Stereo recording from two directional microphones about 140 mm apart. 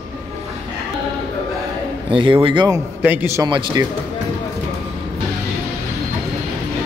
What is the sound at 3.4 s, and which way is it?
Speech, 35° right (ahead or behind).